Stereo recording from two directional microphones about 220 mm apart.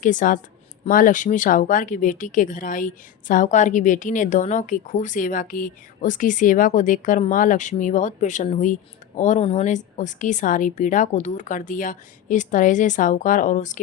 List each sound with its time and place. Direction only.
0.0 s speech: 35° left (ahead or behind)